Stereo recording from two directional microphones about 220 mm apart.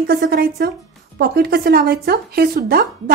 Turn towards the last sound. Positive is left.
turn(degrees=-45)  # may be behind; listen again after turning